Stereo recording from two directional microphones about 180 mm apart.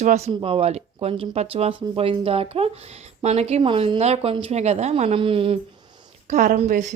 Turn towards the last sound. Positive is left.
turn(degrees=-45)  # may be behind; listen again after turning